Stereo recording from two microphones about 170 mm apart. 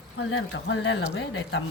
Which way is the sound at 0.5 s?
90° left.